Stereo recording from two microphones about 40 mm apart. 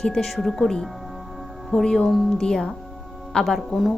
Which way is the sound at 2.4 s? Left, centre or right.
Centre.